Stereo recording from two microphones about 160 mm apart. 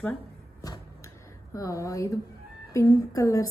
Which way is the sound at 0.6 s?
20° left (ahead or behind).